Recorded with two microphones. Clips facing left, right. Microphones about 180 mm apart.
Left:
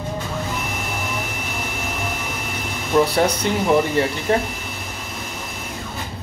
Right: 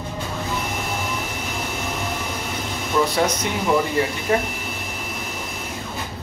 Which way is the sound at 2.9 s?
40° left (ahead or behind).